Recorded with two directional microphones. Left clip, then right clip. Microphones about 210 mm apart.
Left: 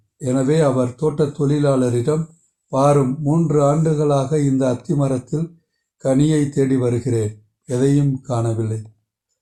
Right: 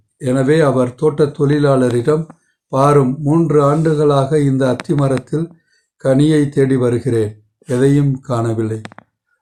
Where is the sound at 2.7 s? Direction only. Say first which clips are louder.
Right 4 dB; 35° right (ahead or behind).